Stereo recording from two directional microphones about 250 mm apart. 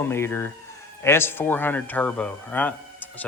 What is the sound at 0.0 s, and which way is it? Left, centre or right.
Speech, centre.